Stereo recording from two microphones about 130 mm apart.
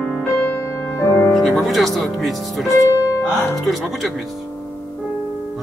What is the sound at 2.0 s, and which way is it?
Speech, centre (ahead or behind).